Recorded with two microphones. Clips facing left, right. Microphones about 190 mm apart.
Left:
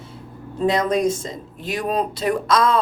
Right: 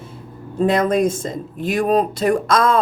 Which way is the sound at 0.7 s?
50° right (ahead or behind).